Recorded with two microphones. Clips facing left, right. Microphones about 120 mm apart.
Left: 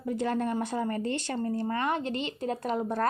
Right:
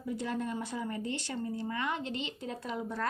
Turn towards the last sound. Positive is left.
turn(degrees=50)  # may be behind; listen again after turning